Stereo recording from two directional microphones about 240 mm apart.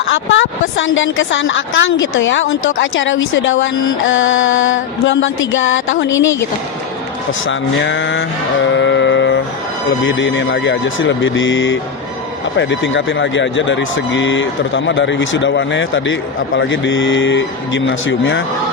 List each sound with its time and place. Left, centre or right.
0.1 s a woman's voice: left
7.4 s a woman's voice: left
8.7 s music: left
10.0 s a woman's voice: left